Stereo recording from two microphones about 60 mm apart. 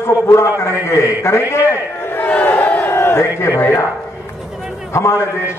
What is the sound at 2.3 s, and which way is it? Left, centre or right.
Crowd, left.